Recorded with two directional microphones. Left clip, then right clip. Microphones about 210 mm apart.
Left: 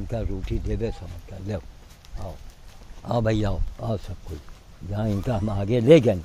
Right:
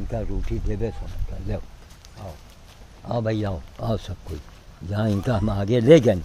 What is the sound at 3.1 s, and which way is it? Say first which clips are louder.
Speech: left 1 dB; 25° left (ahead or behind).